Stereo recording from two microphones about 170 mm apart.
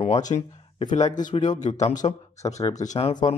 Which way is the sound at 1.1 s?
50° left (ahead or behind).